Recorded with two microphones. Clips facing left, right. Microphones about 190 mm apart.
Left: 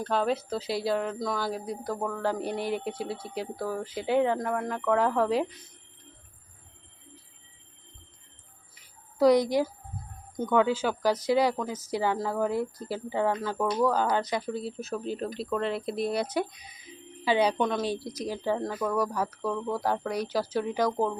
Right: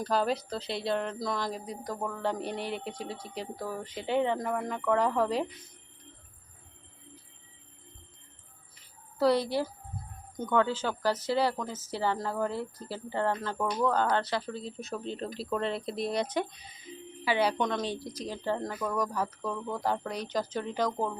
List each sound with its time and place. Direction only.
0.0 s speech: centre (ahead or behind)
9.1 s a woman's voice: 15° left (ahead or behind)